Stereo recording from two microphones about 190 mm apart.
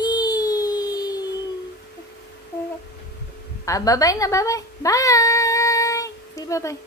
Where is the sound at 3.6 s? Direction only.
15° left (ahead or behind).